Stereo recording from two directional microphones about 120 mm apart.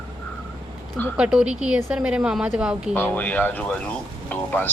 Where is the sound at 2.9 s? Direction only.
15° left (ahead or behind).